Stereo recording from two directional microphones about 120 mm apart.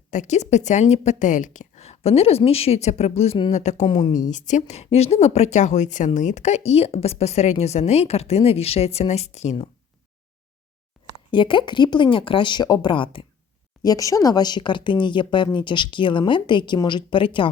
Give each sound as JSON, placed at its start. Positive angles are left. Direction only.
{"t": 0.1, "sound": "a woman's voice", "side_deg": 80}
{"t": 3.5, "sound": "a woman's voice", "side_deg": 75}
{"t": 3.8, "sound": "speech", "side_deg": 50}
{"t": 4.3, "sound": "speech", "side_deg": 90}
{"t": 4.7, "sound": "a woman's voice", "side_deg": 60}
{"t": 11.0, "sound": "a sound", "side_deg": 0}
{"t": 11.3, "sound": "speech", "side_deg": 45}
{"t": 13.8, "sound": "speech", "side_deg": 30}